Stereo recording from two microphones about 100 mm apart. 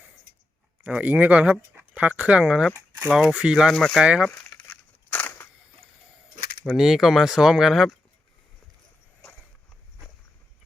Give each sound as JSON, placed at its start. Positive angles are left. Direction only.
{"t": 0.9, "sound": "speech", "side_deg": -15}
{"t": 4.0, "sound": "speech", "side_deg": -10}
{"t": 4.4, "sound": "crumpling", "side_deg": 35}
{"t": 4.7, "sound": "a sound", "side_deg": 20}
{"t": 6.7, "sound": "speech", "side_deg": -5}